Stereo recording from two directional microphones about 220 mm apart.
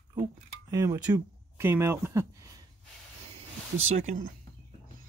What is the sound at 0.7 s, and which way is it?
Speech, 15° right (ahead or behind).